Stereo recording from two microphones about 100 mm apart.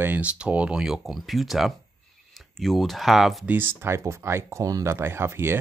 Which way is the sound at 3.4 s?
20° right (ahead or behind).